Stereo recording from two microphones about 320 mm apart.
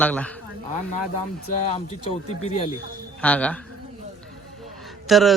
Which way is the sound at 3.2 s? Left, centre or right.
Centre.